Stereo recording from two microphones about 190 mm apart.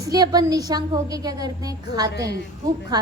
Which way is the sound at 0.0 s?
20° right (ahead or behind).